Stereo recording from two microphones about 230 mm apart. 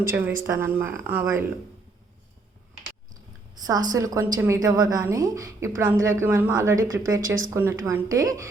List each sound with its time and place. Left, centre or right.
0.4 s a woman's voice: centre
3.5 s a woman's voice: centre
6.8 s speech: right
7.5 s a woman's voice: centre